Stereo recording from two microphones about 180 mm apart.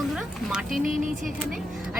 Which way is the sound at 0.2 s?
5° right (ahead or behind).